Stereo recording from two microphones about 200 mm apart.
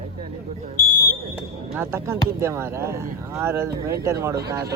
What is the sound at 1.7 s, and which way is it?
A man's voice, 10° right (ahead or behind).